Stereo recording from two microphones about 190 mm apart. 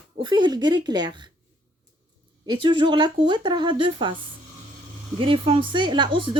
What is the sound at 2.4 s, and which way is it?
Speech, 25° right (ahead or behind).